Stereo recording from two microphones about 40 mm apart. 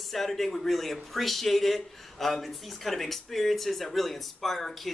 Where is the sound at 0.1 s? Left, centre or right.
Centre.